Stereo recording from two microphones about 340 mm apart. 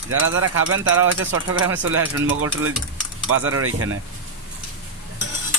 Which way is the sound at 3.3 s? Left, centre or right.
Right.